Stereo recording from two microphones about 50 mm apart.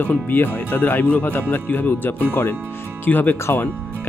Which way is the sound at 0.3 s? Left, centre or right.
Left.